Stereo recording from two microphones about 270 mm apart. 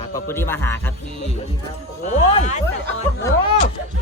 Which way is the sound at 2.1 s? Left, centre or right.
Left.